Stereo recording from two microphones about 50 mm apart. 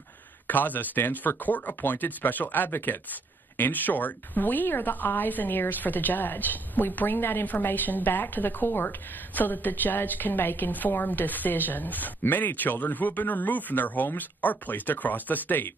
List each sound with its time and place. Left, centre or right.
0.5 s speech: left
7.4 s speech: left